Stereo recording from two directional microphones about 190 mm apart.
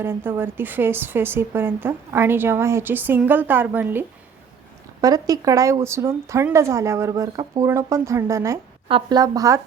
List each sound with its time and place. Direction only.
0.0 s a woman's voice: 10° right (ahead or behind)